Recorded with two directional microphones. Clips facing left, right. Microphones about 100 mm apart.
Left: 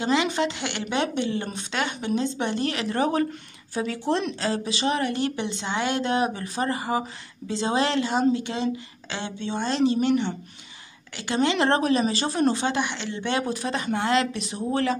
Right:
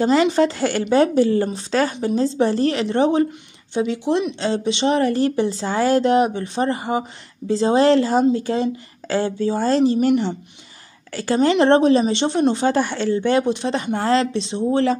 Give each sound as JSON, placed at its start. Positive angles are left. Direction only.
{"t": 0.0, "sound": "a woman's voice", "side_deg": -40}
{"t": 4.4, "sound": "a woman's voice", "side_deg": -30}
{"t": 11.1, "sound": "a woman's voice", "side_deg": -40}